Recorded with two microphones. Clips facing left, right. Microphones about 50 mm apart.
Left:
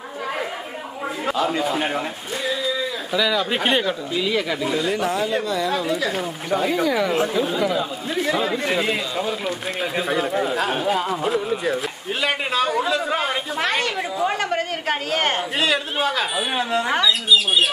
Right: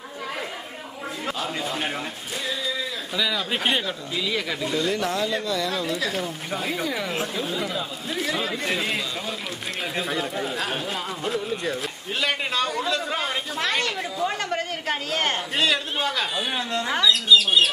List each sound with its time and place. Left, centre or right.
1.2 s speech: centre
13.6 s a woman's voice: left
15.5 s speech: centre